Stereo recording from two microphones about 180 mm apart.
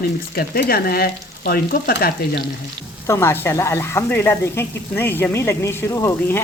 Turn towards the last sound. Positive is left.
turn(degrees=15)  # may be behind; listen again after turning